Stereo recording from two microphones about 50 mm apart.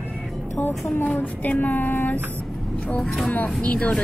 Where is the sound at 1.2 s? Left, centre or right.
Left.